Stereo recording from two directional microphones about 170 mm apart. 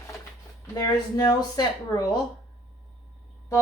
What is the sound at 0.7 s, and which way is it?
Speech, 20° left (ahead or behind).